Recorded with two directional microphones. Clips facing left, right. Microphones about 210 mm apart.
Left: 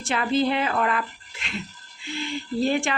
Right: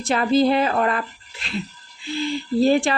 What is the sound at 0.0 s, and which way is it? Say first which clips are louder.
A woman's voice: right 5 dB; 40° right (ahead or behind).